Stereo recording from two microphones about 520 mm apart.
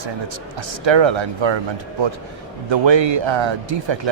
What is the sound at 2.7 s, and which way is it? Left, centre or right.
Speech, right.